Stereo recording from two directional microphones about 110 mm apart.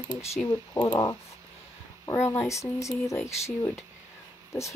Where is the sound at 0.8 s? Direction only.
35° left (ahead or behind).